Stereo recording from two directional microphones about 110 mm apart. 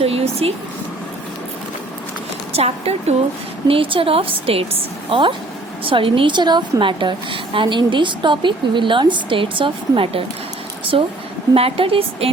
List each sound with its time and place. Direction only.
0.0 s a sound: 65° right (ahead or behind)
2.5 s a woman's voice: 65° right (ahead or behind)
3.7 s a woman's voice: 55° right (ahead or behind)